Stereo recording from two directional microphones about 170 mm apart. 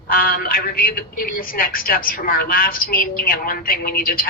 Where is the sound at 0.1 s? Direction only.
60° left (ahead or behind).